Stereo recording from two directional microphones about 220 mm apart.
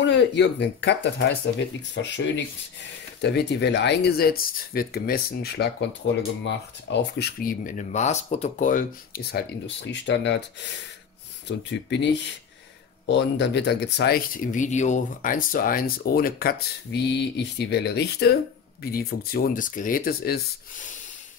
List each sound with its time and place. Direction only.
0.0 s speech: 50° left (ahead or behind)
11.4 s speech: 55° left (ahead or behind)